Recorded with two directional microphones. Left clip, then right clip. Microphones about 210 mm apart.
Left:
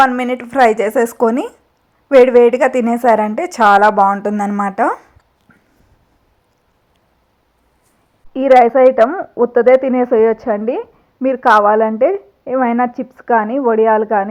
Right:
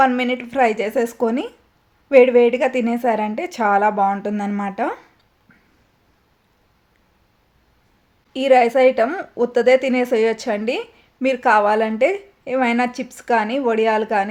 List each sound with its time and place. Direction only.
0.2 s speech: 20° left (ahead or behind)
2.0 s speech: 10° left (ahead or behind)
4.0 s speech: 10° left (ahead or behind)
8.3 s speech: 5° left (ahead or behind)